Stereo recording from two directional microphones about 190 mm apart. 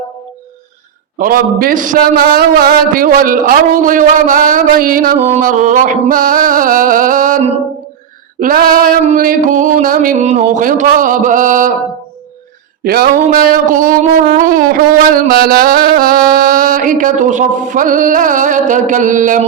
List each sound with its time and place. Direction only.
1.2 s a man's voice: 50° right (ahead or behind)
12.8 s a sound: 55° right (ahead or behind)
13.3 s a man's voice: 45° right (ahead or behind)